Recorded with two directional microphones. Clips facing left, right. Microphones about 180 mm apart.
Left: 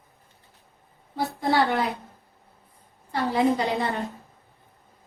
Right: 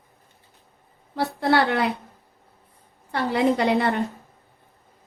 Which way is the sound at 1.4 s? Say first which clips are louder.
Right 2 dB; 65° right (ahead or behind).